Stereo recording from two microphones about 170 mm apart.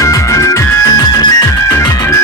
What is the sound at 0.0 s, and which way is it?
Music, 20° left (ahead or behind).